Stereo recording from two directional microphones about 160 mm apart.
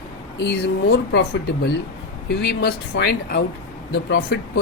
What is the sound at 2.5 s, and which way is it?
Speech, 80° left.